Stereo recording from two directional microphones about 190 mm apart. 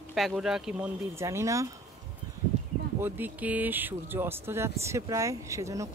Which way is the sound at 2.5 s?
35° right (ahead or behind).